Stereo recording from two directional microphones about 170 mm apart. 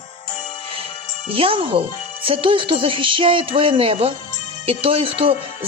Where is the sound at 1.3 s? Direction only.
30° right (ahead or behind).